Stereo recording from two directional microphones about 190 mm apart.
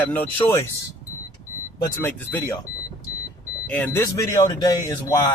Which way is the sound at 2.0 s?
10° left (ahead or behind).